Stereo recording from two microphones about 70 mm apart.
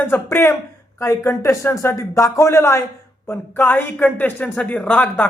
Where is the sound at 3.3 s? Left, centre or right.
Left.